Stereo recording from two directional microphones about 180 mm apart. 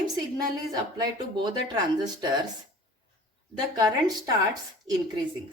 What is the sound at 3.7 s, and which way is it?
Speech, 20° right (ahead or behind).